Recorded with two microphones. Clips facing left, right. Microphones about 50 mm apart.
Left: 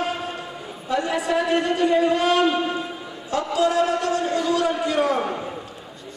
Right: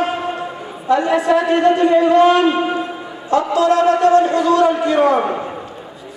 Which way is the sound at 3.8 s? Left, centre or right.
Centre.